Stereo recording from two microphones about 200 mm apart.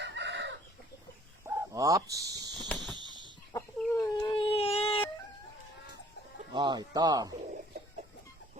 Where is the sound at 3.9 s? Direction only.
15° left (ahead or behind).